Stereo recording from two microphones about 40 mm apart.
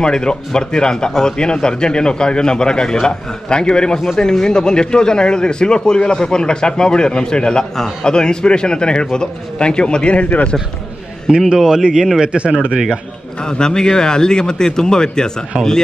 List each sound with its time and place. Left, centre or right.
0.0 s speech: left
7.7 s speech: centre; by 10.5 s left
11.2 s a man's voice: centre
12.2 s speech: right
13.4 s speech: centre